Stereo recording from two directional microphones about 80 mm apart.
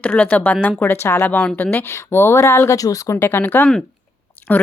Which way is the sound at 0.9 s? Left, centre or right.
Left.